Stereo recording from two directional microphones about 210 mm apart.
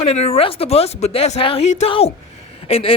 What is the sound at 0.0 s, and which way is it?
Speech, 30° left (ahead or behind).